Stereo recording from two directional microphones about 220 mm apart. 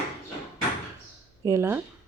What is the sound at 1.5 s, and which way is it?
Speech, 10° right (ahead or behind).